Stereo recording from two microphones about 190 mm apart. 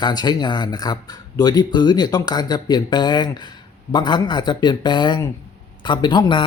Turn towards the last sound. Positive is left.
turn(degrees=25)  # may be behind; listen again after turning